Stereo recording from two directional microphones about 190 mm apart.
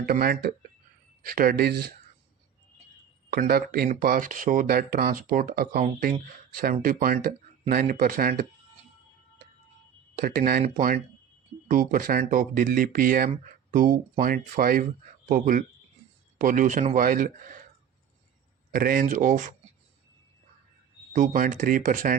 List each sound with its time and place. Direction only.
0.0 s speech: 50° right (ahead or behind)
3.2 s speech: 50° right (ahead or behind)
10.2 s speech: 50° right (ahead or behind)
18.7 s speech: 45° right (ahead or behind)
21.1 s speech: 45° right (ahead or behind)